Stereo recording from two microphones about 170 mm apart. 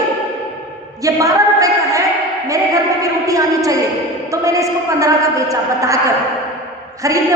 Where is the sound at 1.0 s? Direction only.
20° right (ahead or behind).